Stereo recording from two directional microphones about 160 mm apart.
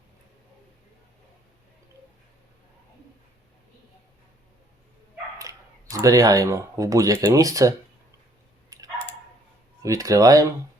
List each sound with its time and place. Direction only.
5.4 s speech: 20° right (ahead or behind)
9.8 s speech: 20° right (ahead or behind)